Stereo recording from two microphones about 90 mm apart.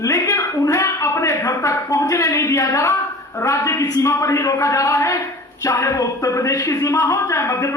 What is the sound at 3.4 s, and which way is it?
Speech, 35° left (ahead or behind).